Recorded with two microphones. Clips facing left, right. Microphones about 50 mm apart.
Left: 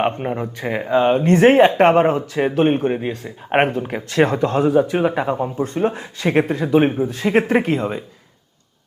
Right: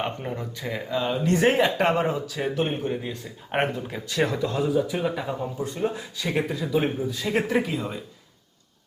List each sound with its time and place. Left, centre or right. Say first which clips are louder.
0.0 s speech: left 9 dB; left